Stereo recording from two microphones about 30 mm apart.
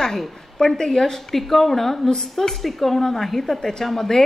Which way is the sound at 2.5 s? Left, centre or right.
Centre.